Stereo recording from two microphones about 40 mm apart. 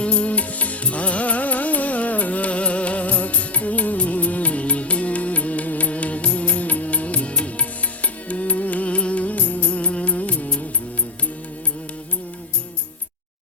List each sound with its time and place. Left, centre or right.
0.0 s music: left